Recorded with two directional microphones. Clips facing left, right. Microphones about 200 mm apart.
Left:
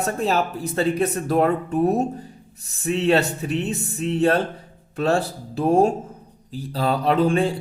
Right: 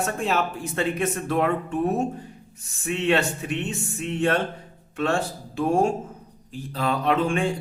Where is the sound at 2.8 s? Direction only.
35° left (ahead or behind).